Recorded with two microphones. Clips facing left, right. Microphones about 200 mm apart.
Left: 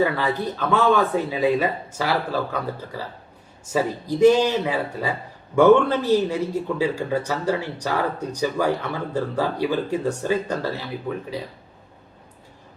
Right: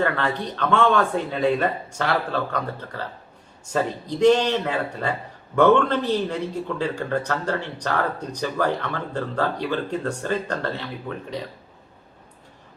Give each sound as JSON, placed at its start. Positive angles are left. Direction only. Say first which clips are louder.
{"t": 0.0, "sound": "a man's voice", "louder": "left 2 dB", "side_deg": 10}